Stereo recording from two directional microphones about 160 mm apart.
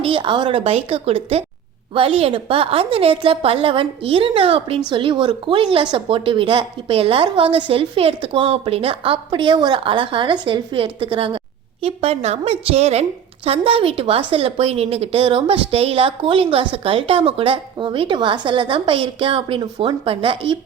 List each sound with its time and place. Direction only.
0.0 s speech: 30° right (ahead or behind)